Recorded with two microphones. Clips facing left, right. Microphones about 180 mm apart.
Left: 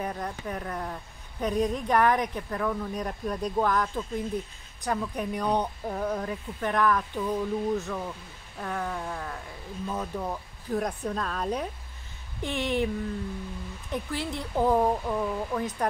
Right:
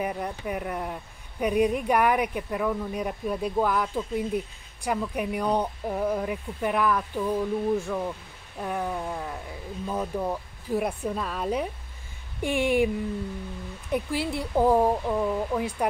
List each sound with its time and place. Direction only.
0.0 s speech: 10° right (ahead or behind)
13.9 s speech: 10° right (ahead or behind)